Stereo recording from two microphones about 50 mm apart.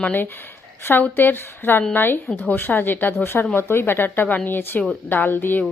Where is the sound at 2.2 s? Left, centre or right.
Left.